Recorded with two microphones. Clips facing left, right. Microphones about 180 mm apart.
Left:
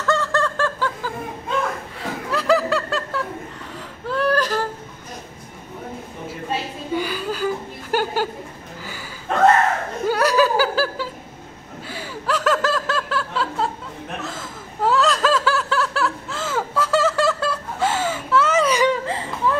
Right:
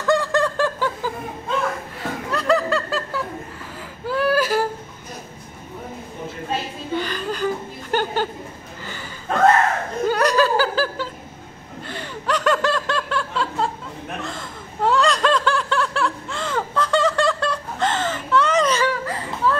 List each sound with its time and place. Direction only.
0.0 s snicker: 15° right (ahead or behind)
2.0 s snicker: centre (ahead or behind)
4.0 s whimper: 5° right (ahead or behind)
6.9 s chuckle: 10° left (ahead or behind)
10.0 s chuckle: 5° left (ahead or behind)
11.9 s snicker: 5° left (ahead or behind)